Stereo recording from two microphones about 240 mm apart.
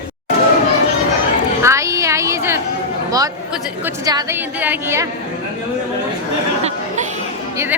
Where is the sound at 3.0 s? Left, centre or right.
Centre.